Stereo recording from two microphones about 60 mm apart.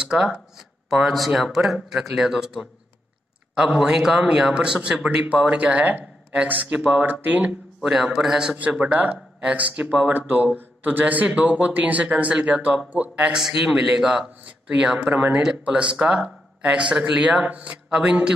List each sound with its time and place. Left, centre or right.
0.0 s speech: centre; by 7.5 s right
7.8 s speech: centre
8.5 s speech: right
10.1 s speech: right
13.3 s speech: centre
15.6 s speech: centre
17.8 s a man's voice: centre